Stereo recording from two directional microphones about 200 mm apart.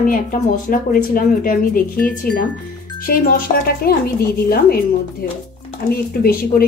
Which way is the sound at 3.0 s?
45° left (ahead or behind).